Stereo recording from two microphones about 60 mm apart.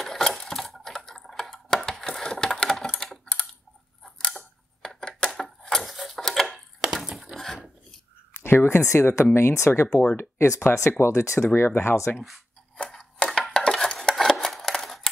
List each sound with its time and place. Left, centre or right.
0.0 s typewriter: centre
4.0 s scissors: centre
4.8 s a sound: centre
8.4 s speech: left
13.2 s dishes: centre
14.1 s scissors: centre